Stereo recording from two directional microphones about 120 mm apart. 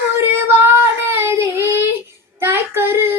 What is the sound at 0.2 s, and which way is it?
Child singing, 20° right (ahead or behind).